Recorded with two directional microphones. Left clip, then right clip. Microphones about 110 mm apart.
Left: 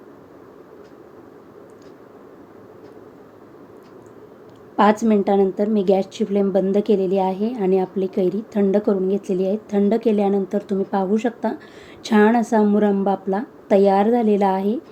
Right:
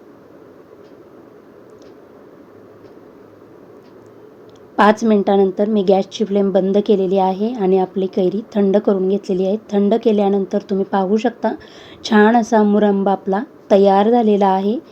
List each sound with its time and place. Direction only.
4.8 s a woman's voice: 25° right (ahead or behind)